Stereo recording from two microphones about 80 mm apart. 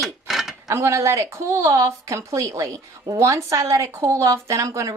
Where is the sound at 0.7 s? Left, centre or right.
Right.